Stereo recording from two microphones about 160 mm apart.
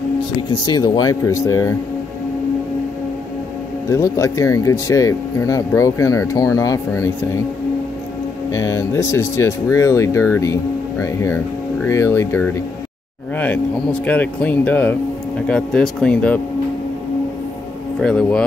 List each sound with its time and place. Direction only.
0.4 s speech: 25° left (ahead or behind)
3.9 s speech: 15° left (ahead or behind)
8.5 s speech: 15° left (ahead or behind)
18.0 s speech: 5° left (ahead or behind)